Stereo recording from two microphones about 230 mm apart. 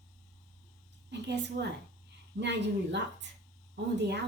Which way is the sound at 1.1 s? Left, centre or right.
Right.